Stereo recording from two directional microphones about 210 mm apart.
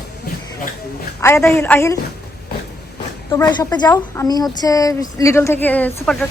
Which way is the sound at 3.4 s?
20° left (ahead or behind).